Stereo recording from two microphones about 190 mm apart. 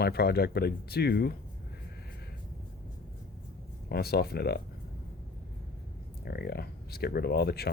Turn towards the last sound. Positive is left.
turn(degrees=55)  # may be behind; listen again after turning